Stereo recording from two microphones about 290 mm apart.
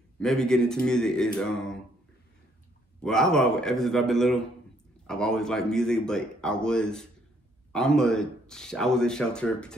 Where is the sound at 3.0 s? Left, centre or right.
Centre.